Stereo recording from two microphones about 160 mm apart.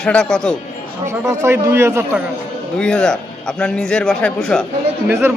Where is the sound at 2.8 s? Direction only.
5° left (ahead or behind).